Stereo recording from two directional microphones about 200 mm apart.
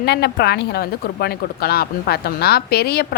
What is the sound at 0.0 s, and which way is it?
A woman's voice, 55° left (ahead or behind).